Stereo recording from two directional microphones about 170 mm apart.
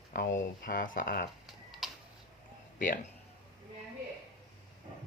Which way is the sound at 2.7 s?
55° left (ahead or behind).